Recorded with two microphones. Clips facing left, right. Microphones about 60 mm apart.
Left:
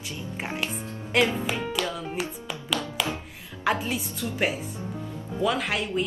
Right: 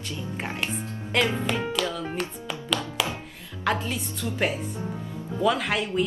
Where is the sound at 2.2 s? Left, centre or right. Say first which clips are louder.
Right 1 dB; centre.